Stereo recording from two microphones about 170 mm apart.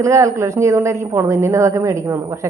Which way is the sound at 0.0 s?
15° right (ahead or behind).